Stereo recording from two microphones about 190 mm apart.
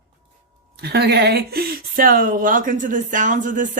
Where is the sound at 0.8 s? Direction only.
60° right (ahead or behind).